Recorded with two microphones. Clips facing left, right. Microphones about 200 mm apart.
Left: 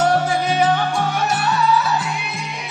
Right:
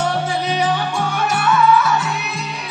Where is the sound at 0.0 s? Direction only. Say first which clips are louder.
Left 3 dB; 45° left (ahead or behind).